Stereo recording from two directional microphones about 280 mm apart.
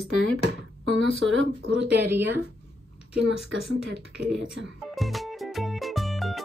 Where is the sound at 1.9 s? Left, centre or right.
Centre.